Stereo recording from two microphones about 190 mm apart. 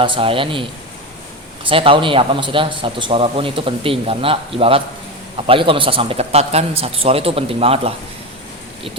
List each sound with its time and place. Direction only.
0.0 s a man's voice: 25° right (ahead or behind)
1.6 s a man's voice: 30° right (ahead or behind)